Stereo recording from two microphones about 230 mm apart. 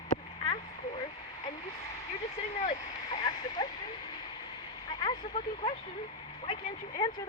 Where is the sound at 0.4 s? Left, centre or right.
Left.